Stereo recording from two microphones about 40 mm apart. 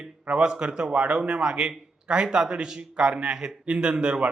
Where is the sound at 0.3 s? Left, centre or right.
Right.